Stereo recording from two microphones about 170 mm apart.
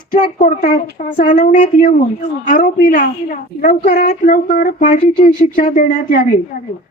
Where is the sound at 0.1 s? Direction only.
50° left (ahead or behind).